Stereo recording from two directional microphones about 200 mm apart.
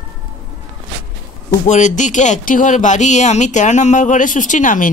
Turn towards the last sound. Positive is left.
turn(degrees=40)  # may be behind; listen again after turning